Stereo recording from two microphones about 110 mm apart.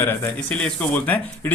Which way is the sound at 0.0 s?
20° left (ahead or behind).